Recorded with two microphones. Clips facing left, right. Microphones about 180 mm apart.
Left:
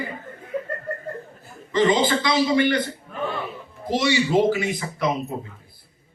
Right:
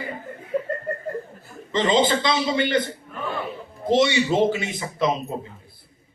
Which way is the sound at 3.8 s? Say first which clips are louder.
Right 3 dB; 20° right (ahead or behind).